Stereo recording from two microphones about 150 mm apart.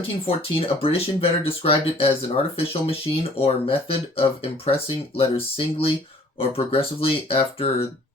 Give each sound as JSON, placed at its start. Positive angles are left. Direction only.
{"t": 0.3, "sound": "speech", "side_deg": 40}